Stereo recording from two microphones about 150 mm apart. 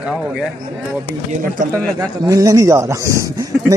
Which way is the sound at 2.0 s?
25° right (ahead or behind).